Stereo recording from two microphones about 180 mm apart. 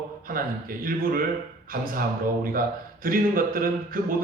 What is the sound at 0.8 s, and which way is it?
Speech, 50° right (ahead or behind).